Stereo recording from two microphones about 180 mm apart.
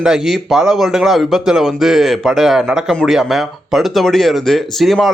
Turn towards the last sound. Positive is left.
turn(degrees=0)  # may be behind; listen again after turning